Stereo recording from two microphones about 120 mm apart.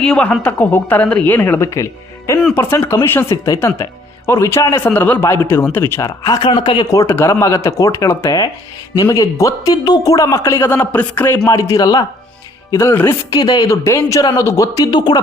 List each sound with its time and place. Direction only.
0.0 s a man's voice: 10° left (ahead or behind)
6.1 s speech: 35° left (ahead or behind)
6.8 s a man's voice: 25° left (ahead or behind)
8.2 s a man's voice: 35° left (ahead or behind)
12.7 s a man's voice: 20° left (ahead or behind)
13.3 s a man's voice: 30° left (ahead or behind)